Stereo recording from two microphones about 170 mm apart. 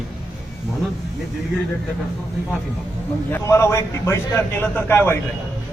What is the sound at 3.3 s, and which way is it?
A man's voice, 15° left (ahead or behind).